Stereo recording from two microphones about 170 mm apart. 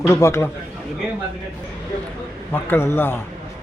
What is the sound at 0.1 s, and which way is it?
Speech, 15° left (ahead or behind).